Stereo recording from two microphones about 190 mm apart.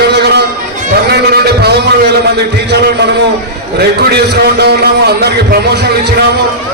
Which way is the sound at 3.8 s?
60° right (ahead or behind).